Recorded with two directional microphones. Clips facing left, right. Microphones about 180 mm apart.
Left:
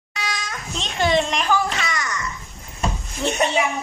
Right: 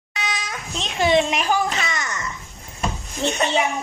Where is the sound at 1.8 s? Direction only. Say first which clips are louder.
Left 1 dB; 25° right (ahead or behind).